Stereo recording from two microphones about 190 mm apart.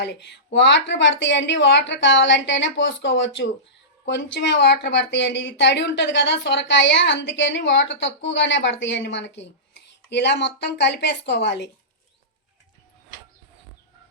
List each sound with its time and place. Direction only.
0.0 s speech: 65° left (ahead or behind)